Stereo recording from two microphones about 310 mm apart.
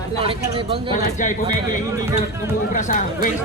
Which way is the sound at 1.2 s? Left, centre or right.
Left.